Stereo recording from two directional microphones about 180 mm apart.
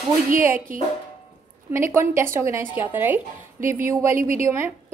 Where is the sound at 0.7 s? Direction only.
50° right (ahead or behind).